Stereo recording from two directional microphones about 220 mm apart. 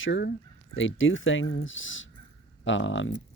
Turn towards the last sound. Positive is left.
turn(degrees=60)  # may be behind; listen again after turning